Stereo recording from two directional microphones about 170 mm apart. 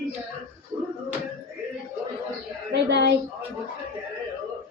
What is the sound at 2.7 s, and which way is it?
Speech, 75° right (ahead or behind).